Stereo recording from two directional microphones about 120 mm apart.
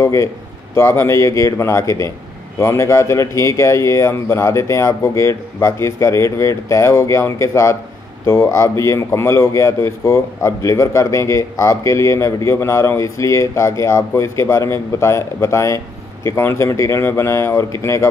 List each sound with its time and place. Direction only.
0.0 s a man's voice: 25° left (ahead or behind)